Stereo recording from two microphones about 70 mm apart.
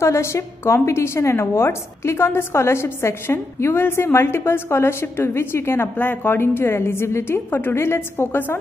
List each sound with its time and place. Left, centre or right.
0.0 s a woman's voice: left